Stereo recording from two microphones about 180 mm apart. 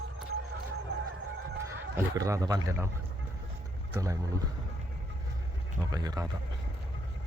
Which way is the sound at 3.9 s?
20° right (ahead or behind).